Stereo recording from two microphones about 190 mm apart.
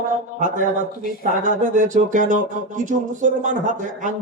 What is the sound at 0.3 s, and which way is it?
Speech, 40° right (ahead or behind).